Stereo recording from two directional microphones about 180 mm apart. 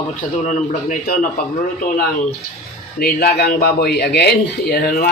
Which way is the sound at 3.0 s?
60° left (ahead or behind).